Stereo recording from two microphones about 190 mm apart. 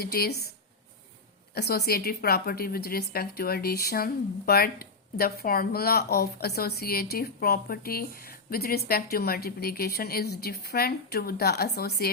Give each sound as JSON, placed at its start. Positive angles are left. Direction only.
{"t": 0.0, "sound": "speech", "side_deg": 55}
{"t": 1.5, "sound": "a woman's voice", "side_deg": 55}